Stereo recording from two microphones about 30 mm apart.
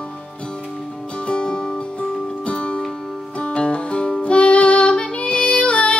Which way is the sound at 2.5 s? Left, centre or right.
Left.